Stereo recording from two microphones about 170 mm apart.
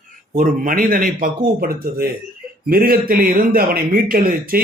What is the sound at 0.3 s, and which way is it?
A man's voice, 50° right (ahead or behind).